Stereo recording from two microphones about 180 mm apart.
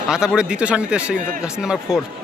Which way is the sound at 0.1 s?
5° right (ahead or behind).